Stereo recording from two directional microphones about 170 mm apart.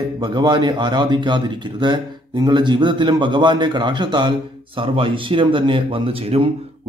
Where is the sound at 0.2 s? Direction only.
25° right (ahead or behind).